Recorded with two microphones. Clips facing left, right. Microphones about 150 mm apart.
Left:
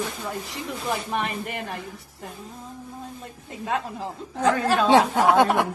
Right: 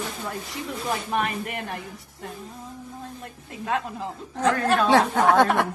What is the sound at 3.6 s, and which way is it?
A woman's voice, centre (ahead or behind).